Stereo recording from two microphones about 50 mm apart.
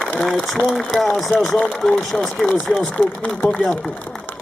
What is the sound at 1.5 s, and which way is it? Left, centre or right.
Speech, centre.